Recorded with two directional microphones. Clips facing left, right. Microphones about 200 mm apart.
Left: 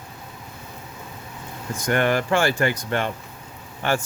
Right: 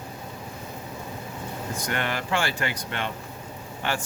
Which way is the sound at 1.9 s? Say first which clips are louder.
Left 9 dB; 50° left (ahead or behind).